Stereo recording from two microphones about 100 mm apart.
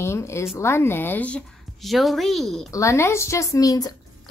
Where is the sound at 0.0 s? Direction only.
25° left (ahead or behind).